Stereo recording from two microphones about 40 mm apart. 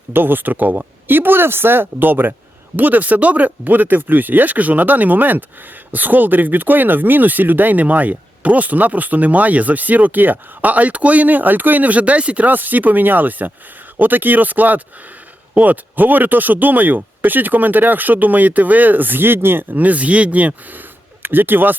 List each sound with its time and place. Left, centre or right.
0.1 s speech: right
2.7 s speech: right
12.5 s speech: right
19.7 s speech: right
21.2 s speech: right